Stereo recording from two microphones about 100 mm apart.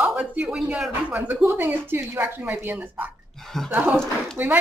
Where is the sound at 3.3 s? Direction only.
5° left (ahead or behind).